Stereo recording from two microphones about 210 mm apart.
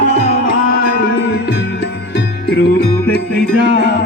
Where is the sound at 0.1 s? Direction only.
30° left (ahead or behind).